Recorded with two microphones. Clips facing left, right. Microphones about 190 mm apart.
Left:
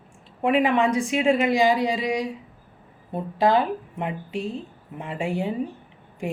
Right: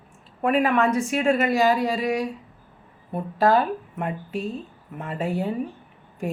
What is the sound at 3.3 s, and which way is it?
Speech, 15° left (ahead or behind).